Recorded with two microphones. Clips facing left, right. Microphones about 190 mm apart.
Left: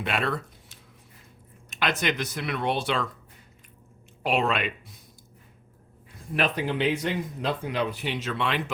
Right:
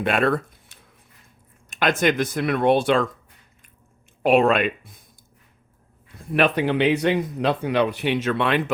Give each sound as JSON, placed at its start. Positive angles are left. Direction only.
{"t": 0.0, "sound": "speech", "side_deg": -50}
{"t": 4.2, "sound": "speech", "side_deg": -50}
{"t": 6.3, "sound": "speech", "side_deg": -70}